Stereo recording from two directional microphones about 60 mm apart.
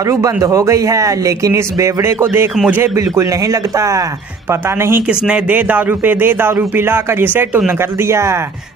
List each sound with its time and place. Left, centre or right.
0.0 s speech: right
2.0 s speech: right
3.4 s speech: right
4.5 s speech: right
5.0 s speech: centre; by 7.4 s right
8.0 s speech: right